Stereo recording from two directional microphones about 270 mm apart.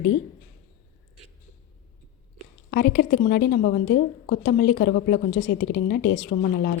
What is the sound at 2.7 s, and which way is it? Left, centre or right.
A woman's voice, left.